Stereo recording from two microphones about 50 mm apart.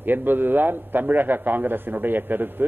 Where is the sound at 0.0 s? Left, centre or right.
Right.